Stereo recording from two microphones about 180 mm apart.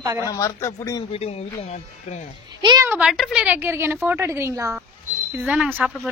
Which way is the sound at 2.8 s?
5° right (ahead or behind).